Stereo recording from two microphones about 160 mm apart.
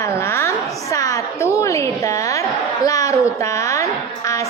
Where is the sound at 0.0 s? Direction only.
15° left (ahead or behind).